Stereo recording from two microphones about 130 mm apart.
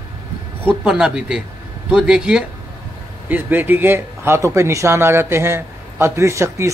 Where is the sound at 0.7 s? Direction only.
5° right (ahead or behind).